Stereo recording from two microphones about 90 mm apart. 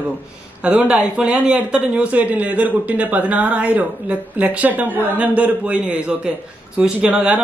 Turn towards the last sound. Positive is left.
turn(degrees=-15)  # may be behind; listen again after turning